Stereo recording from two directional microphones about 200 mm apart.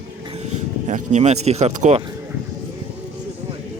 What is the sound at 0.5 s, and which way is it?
Vehicle, 35° right (ahead or behind).